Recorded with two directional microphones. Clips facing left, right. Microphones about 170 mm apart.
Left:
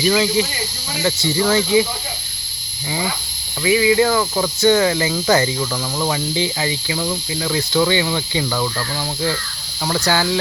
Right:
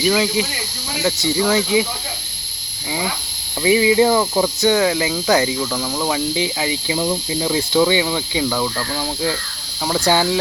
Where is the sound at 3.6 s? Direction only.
20° right (ahead or behind).